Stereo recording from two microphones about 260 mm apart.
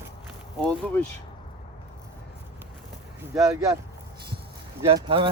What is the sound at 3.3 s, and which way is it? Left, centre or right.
Speech, centre.